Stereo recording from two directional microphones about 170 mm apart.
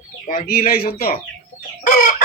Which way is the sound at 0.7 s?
60° left (ahead or behind).